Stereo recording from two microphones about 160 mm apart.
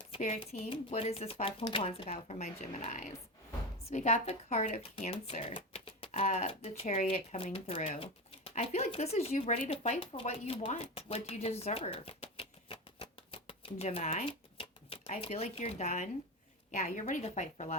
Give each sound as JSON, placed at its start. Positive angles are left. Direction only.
{"t": 0.2, "sound": "speech", "side_deg": 40}